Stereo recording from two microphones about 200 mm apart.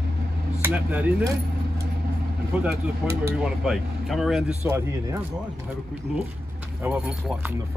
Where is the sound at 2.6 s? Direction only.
15° right (ahead or behind).